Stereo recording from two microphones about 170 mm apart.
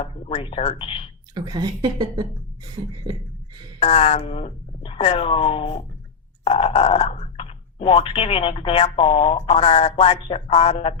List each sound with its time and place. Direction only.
0.0 s speech: 35° left (ahead or behind)
1.3 s a woman's voice: 25° right (ahead or behind)
3.8 s speech: 35° left (ahead or behind)